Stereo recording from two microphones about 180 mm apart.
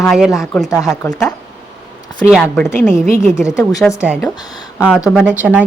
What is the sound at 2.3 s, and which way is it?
Speech, 5° left (ahead or behind).